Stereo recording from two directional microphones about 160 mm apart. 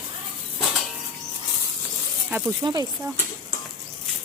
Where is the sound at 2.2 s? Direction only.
15° right (ahead or behind).